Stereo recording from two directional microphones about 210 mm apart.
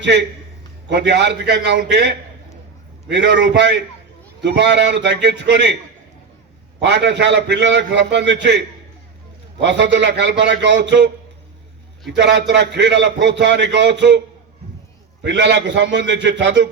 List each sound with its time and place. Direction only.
0.0 s a man's voice: 55° right (ahead or behind)
6.7 s a man's voice: 55° right (ahead or behind)
15.2 s a man's voice: 55° right (ahead or behind)